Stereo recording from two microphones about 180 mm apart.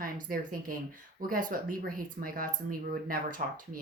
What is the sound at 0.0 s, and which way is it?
A woman's voice, 50° right (ahead or behind).